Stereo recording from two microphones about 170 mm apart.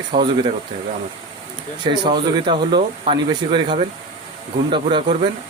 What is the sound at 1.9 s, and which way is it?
Speech, 25° right (ahead or behind).